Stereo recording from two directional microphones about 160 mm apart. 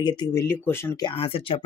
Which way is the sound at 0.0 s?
25° left (ahead or behind).